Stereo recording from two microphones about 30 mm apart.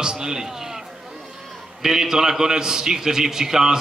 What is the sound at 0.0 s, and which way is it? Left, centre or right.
A man's voice, right.